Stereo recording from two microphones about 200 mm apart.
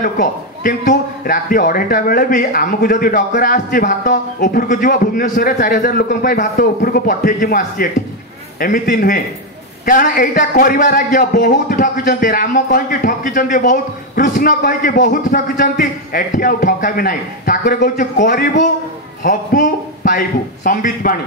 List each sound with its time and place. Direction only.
0.0 s a man's voice: 40° left (ahead or behind)